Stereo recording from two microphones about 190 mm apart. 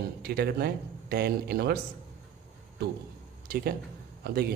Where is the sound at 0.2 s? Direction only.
55° right (ahead or behind).